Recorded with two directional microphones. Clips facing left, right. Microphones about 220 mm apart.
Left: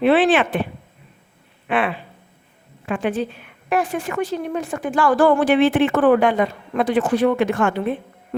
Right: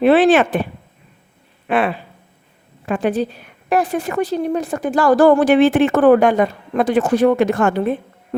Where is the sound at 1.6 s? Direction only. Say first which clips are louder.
Right 3 dB; 40° right (ahead or behind).